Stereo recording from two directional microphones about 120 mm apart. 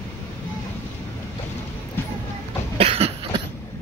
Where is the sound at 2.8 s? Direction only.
55° right (ahead or behind).